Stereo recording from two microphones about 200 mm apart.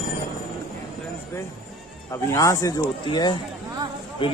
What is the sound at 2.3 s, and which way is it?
Speech, 15° left (ahead or behind).